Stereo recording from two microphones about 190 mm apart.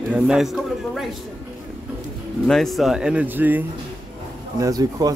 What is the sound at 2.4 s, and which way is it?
A man's voice, centre (ahead or behind).